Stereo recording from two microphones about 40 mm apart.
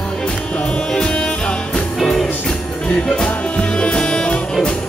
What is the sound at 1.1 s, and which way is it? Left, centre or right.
Music, left.